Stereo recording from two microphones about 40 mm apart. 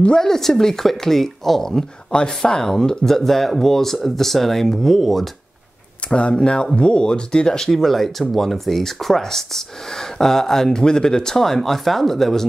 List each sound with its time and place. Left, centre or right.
0.2 s speech: centre
2.1 s speech: left; by 5.3 s centre
6.0 s speech: left
7.7 s speech: centre